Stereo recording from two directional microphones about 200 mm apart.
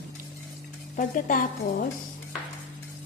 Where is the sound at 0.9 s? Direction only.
40° left (ahead or behind).